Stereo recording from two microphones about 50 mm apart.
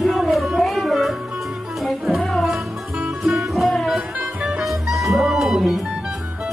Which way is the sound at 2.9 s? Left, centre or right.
Centre.